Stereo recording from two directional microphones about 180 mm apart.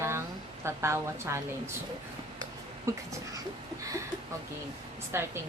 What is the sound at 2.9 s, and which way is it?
Speech, 15° right (ahead or behind).